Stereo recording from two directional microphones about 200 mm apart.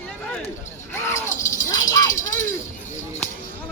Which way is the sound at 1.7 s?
20° left (ahead or behind).